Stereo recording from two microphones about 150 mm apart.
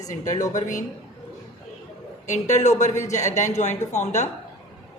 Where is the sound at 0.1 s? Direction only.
55° left (ahead or behind).